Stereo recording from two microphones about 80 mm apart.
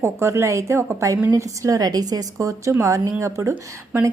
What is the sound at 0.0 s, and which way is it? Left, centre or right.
A woman's voice, right.